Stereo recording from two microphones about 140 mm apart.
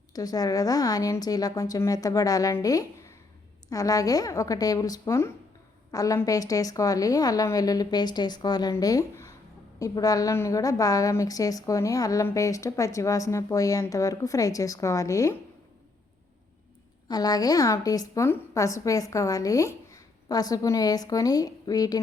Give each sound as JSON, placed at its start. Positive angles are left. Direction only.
{"t": 0.1, "sound": "a woman's voice", "side_deg": 25}
{"t": 17.1, "sound": "a woman's voice", "side_deg": 30}